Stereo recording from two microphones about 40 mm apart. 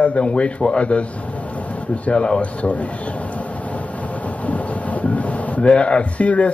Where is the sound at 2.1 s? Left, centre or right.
Left.